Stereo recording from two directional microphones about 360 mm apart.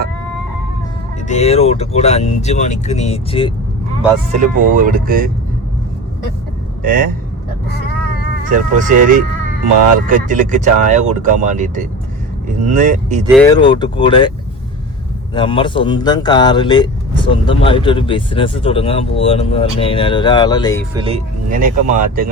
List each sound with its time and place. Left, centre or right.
1.3 s speech: centre
4.4 s speech: right
6.8 s speech: right
8.4 s speech: right
13.2 s speech: centre
13.7 s speech: centre
20.9 s speech: centre